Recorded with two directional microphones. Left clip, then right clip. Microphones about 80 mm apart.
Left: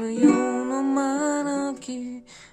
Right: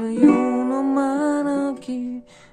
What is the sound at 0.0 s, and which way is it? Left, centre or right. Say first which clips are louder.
Music: right 3 dB; left.